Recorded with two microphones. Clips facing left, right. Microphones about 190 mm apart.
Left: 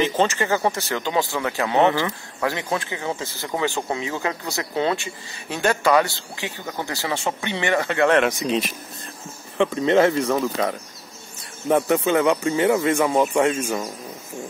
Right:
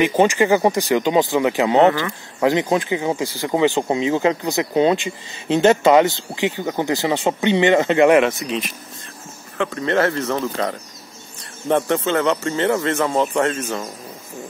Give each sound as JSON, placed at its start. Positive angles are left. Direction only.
{"t": 0.2, "sound": "speech", "side_deg": -15}
{"t": 1.9, "sound": "speech", "side_deg": 20}
{"t": 2.4, "sound": "speech", "side_deg": -20}
{"t": 9.6, "sound": "speech", "side_deg": 15}